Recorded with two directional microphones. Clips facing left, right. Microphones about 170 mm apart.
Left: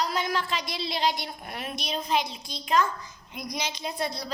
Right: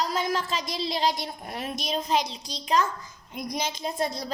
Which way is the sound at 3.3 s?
50° right (ahead or behind).